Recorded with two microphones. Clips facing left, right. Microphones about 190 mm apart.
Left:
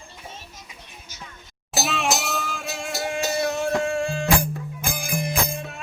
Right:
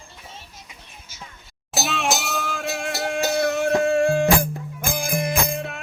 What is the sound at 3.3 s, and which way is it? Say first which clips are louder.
Music: right 4 dB; 65° right (ahead or behind).